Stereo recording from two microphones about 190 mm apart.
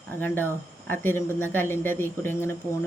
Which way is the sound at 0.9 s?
10° left (ahead or behind).